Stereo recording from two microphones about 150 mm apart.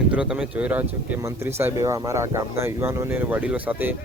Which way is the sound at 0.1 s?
5° right (ahead or behind).